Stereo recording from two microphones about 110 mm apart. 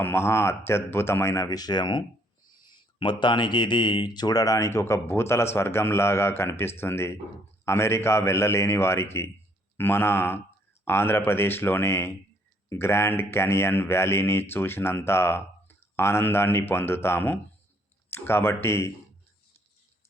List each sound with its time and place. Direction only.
0.0 s speech: 20° left (ahead or behind)